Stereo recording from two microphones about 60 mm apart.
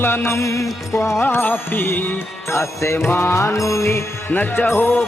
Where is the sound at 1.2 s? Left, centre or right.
Left.